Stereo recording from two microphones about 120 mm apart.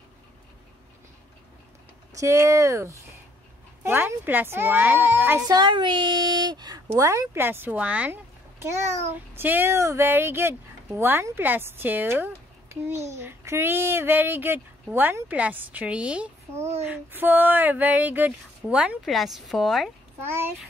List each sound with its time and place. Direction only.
2.1 s speech: 25° right (ahead or behind)
5.5 s speech: 40° right (ahead or behind); by 8.2 s 10° right (ahead or behind)
8.5 s a child's voice: 25° right (ahead or behind); by 19.9 s centre (ahead or behind)
20.2 s speech: 20° right (ahead or behind)